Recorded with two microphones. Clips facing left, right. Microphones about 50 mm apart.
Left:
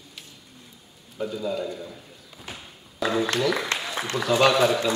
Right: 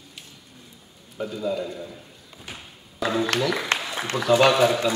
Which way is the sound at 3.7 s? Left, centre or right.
Right.